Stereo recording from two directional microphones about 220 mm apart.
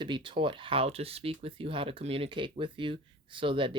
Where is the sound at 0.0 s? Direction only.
20° right (ahead or behind).